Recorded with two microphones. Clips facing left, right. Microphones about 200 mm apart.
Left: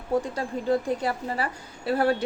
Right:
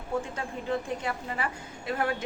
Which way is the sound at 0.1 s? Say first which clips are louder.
Left 6 dB; 35° left (ahead or behind).